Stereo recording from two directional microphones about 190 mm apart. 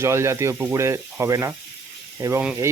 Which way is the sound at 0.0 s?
15° right (ahead or behind).